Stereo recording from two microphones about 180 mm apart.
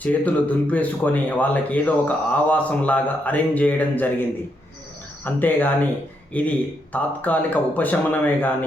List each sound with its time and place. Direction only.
0.0 s speech: 10° left (ahead or behind)